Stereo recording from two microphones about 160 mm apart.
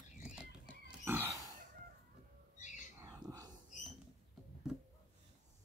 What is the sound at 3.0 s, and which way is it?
Bird, 20° right (ahead or behind).